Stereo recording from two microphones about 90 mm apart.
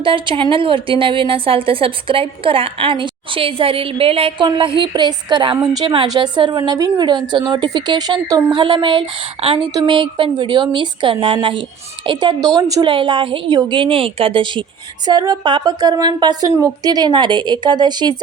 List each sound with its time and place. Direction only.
0.0 s a woman's voice: 70° right (ahead or behind); by 4.4 s 90° right
4.5 s speech: 70° right (ahead or behind)
5.8 s a woman's voice: 75° right (ahead or behind)
6.1 s speech: 60° right (ahead or behind)
6.6 s a woman's voice: 40° right (ahead or behind)
7.0 s a woman's voice: 55° right (ahead or behind)
8.4 s a woman's voice: 65° right (ahead or behind)
9.8 s a woman's voice: 70° right (ahead or behind)
12.0 s a woman's voice: 55° right (ahead or behind)
12.8 s a woman's voice: 70° right (ahead or behind)
15.0 s a woman's voice: 45° right (ahead or behind)